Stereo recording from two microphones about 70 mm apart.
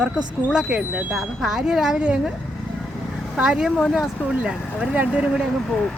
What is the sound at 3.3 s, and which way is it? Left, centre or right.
Speech, centre.